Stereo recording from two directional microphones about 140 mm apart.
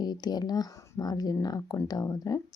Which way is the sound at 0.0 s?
30° left (ahead or behind).